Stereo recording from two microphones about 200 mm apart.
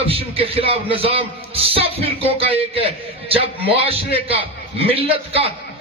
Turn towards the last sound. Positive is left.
turn(degrees=-30)  # may be behind; listen again after turning